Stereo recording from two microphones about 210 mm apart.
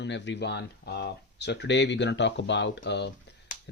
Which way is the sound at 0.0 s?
55° left (ahead or behind).